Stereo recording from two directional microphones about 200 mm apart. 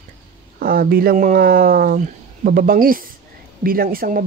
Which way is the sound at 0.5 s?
50° right (ahead or behind).